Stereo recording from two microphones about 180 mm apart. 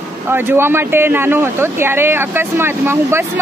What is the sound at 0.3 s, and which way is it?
Speech, 10° right (ahead or behind).